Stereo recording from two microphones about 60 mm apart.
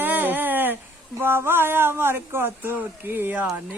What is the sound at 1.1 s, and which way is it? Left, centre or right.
Speech, right.